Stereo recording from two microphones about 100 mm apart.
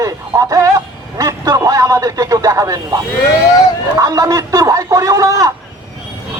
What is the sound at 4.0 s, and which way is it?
A man's voice, 30° right (ahead or behind).